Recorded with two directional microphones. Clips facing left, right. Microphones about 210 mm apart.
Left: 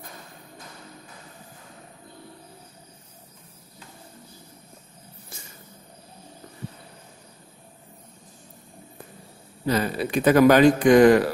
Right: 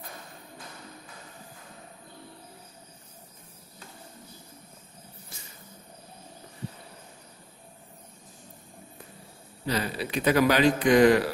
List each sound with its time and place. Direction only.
9.7 s a man's voice: 50° left (ahead or behind)